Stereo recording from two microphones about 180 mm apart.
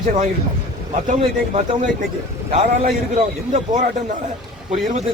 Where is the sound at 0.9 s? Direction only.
40° right (ahead or behind).